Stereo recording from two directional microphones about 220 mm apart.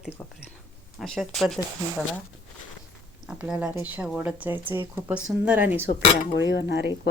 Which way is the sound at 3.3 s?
5° right (ahead or behind).